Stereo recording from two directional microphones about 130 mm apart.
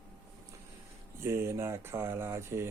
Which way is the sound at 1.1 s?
20° right (ahead or behind).